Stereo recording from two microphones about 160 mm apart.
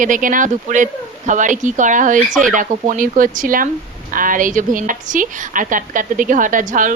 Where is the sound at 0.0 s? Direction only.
55° right (ahead or behind).